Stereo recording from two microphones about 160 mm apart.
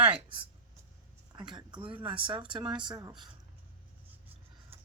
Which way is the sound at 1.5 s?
30° right (ahead or behind).